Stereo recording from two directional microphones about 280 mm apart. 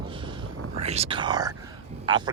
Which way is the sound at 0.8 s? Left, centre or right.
Right.